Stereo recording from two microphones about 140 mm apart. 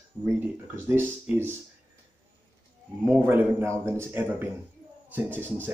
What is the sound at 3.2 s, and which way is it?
Speech, 15° right (ahead or behind).